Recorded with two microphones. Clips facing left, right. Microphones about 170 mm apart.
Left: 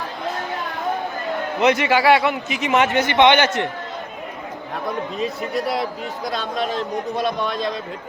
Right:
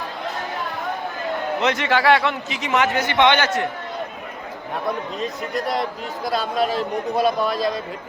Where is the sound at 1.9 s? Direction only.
10° left (ahead or behind).